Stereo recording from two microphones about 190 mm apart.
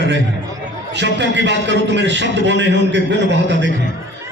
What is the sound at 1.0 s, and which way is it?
A man's voice, 65° right (ahead or behind).